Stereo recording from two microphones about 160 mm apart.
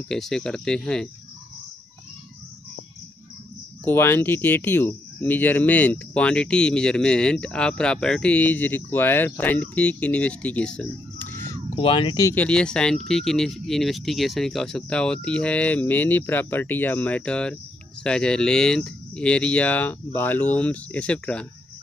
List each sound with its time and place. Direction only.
0.1 s speech: 5° left (ahead or behind)
3.8 s speech: 15° left (ahead or behind)
11.7 s speech: 30° left (ahead or behind)
12.4 s speech: 5° left (ahead or behind)